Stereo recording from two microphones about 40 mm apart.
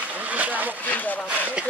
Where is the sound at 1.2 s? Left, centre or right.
Right.